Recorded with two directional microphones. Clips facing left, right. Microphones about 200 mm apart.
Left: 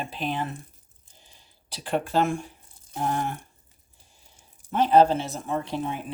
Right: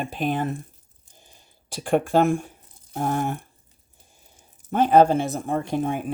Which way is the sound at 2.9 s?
50° right (ahead or behind).